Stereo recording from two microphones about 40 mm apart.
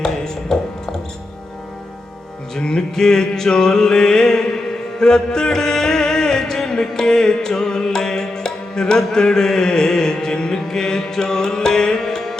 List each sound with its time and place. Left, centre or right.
0.0 s music: centre
2.6 s music: left